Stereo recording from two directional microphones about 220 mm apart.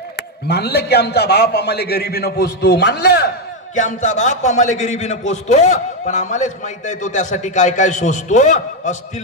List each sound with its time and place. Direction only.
0.5 s a man's voice: 45° left (ahead or behind)
3.7 s a man's voice: 35° left (ahead or behind)